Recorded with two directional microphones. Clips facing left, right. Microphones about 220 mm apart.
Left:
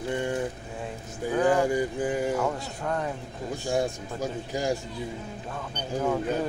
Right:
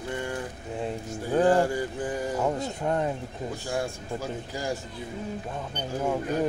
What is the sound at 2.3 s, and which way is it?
Speech, 20° right (ahead or behind).